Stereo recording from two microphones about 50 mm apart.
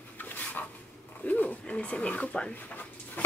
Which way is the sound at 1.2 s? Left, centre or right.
Left.